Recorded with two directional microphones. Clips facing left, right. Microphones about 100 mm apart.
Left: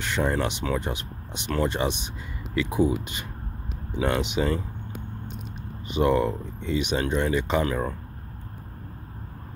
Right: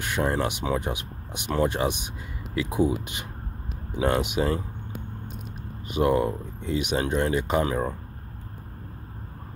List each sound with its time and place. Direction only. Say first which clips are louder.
0.0 s speech: even; 10° right (ahead or behind)
5.9 s speech: even; 10° right (ahead or behind)